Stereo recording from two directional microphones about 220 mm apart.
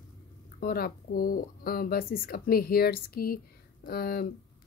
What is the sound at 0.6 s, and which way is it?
Speech, 45° left (ahead or behind).